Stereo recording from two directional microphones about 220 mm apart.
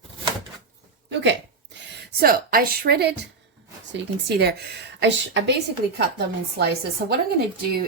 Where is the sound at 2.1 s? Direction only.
40° right (ahead or behind).